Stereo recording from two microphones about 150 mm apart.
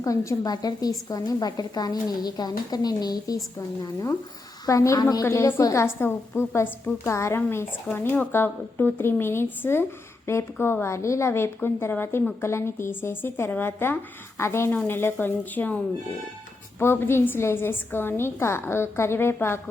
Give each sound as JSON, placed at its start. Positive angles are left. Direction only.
{"t": 0.0, "sound": "a woman's voice", "side_deg": 20}
{"t": 4.6, "sound": "a woman's voice", "side_deg": 20}
{"t": 16.8, "sound": "a woman's voice", "side_deg": 15}